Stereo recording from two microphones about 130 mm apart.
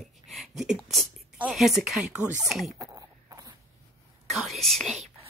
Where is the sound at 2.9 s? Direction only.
25° right (ahead or behind).